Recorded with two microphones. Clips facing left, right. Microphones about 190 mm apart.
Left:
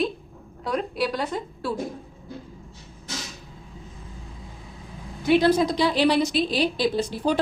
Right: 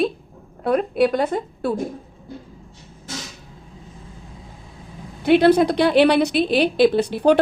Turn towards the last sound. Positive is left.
turn(degrees=-65)  # may be behind; listen again after turning